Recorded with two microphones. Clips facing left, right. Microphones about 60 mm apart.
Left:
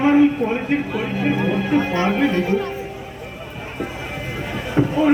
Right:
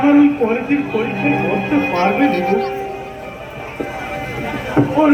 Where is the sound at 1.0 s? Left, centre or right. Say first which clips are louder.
Right 3 dB; right.